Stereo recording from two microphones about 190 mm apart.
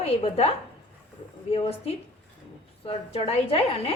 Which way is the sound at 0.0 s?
30° left (ahead or behind).